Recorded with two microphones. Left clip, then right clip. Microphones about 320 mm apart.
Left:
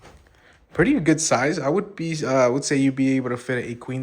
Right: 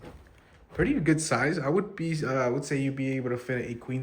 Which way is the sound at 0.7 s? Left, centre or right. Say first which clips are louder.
Left 7 dB; centre.